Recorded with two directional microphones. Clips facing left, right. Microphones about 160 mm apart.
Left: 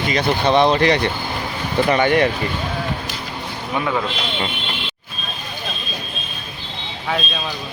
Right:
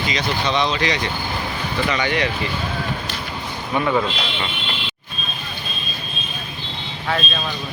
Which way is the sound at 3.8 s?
Centre (ahead or behind).